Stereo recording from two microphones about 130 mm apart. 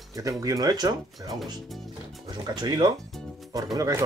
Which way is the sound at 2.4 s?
35° right (ahead or behind).